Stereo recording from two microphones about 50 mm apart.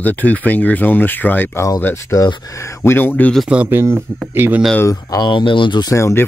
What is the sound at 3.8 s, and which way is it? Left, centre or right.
Speech, right.